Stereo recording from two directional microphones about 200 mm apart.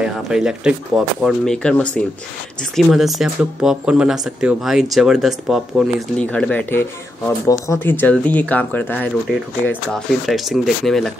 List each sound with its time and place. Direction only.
0.0 s speech: 5° right (ahead or behind)